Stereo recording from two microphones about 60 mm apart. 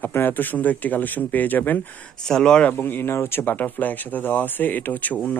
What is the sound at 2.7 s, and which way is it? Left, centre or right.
Speech, left.